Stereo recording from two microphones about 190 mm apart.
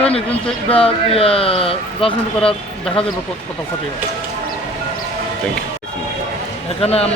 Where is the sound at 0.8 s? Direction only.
30° left (ahead or behind).